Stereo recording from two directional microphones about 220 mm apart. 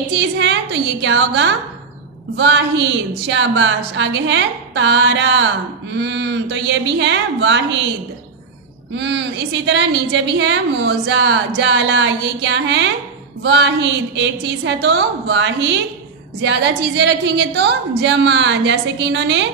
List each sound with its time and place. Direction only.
0.1 s a woman's voice: 55° right (ahead or behind)
8.9 s a woman's voice: 55° right (ahead or behind)